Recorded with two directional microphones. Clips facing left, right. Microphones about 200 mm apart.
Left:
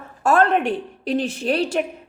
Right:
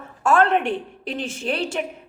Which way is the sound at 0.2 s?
40° left (ahead or behind).